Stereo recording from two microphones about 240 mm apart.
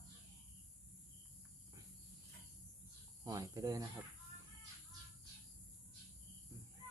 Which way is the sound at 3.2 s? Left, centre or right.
Centre.